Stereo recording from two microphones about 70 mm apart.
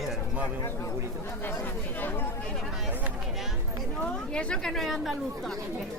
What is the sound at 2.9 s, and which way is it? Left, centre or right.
Speech, right.